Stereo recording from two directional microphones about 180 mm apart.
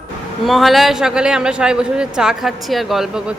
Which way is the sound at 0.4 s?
Centre (ahead or behind).